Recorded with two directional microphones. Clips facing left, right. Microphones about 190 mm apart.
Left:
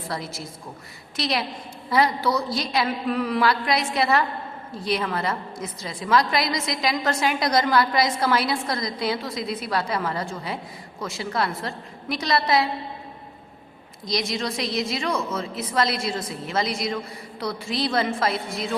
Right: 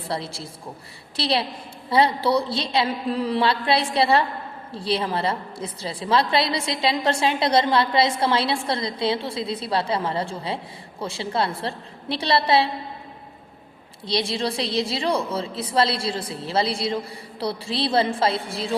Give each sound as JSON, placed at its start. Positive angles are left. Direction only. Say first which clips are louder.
{"t": 0.1, "sound": "a woman's voice", "louder": "right 3 dB", "side_deg": -30}
{"t": 14.1, "sound": "a woman's voice", "louder": "right 2 dB", "side_deg": -30}